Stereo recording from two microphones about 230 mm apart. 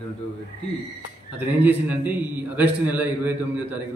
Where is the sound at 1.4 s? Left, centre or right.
Centre.